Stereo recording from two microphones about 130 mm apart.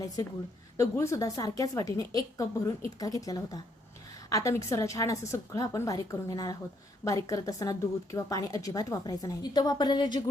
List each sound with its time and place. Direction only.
0.8 s a woman's voice: 20° left (ahead or behind)